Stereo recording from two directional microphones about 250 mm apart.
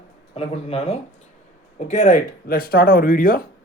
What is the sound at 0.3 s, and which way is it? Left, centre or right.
Speech, left.